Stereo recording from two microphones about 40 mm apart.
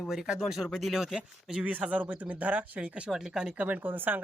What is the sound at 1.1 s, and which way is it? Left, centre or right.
Speech, centre.